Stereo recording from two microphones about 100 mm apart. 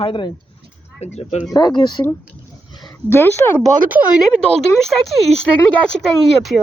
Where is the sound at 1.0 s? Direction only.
90° left.